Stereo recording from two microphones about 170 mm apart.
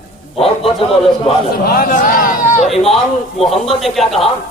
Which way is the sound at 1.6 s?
60° left (ahead or behind).